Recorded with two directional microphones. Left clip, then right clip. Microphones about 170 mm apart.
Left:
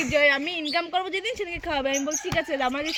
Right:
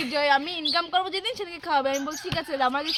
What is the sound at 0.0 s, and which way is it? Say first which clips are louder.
A woman's voice: left 2 dB; 25° right (ahead or behind).